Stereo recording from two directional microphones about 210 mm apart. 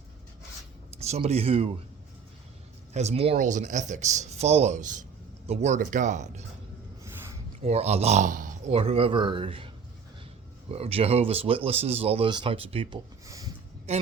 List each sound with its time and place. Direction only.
0.9 s speech: 30° right (ahead or behind)
2.9 s speech: 30° right (ahead or behind)
7.6 s speech: 30° right (ahead or behind)
13.9 s speech: 30° right (ahead or behind)